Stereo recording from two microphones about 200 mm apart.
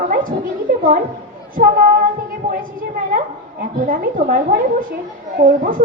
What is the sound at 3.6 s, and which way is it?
A woman's voice, 45° right (ahead or behind).